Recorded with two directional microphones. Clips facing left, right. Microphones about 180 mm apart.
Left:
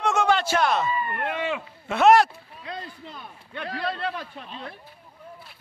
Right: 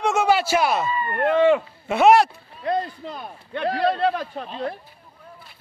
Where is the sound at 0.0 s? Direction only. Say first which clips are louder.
Right 3 dB; 5° right (ahead or behind).